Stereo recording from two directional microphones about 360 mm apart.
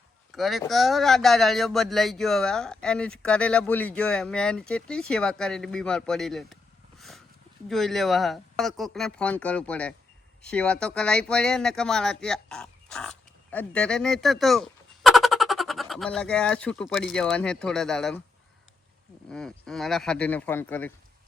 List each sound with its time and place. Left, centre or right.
0.3 s speech: centre
7.7 s speech: centre
19.3 s speech: centre